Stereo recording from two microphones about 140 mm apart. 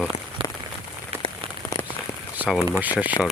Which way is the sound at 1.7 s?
25° left (ahead or behind).